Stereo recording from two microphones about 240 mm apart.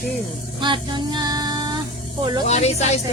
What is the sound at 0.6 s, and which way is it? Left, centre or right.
Female singing, centre.